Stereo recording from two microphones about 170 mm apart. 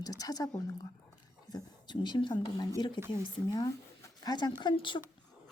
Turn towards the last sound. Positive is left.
turn(degrees=30)  # may be behind; listen again after turning